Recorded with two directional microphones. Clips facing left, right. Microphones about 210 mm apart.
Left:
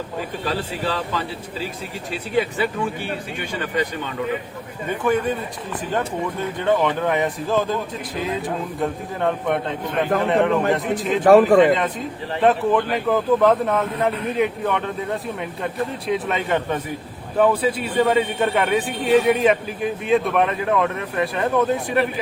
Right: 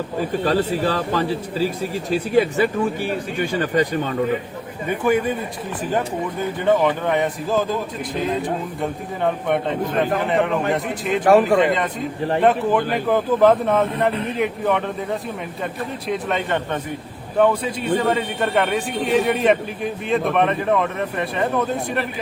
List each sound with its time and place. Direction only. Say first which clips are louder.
0.4 s a man's voice: right 6 dB; 45° right (ahead or behind)
4.9 s a man's voice: right 1 dB; 10° right (ahead or behind)
6.7 s a man's voice: right 1 dB; centre (ahead or behind)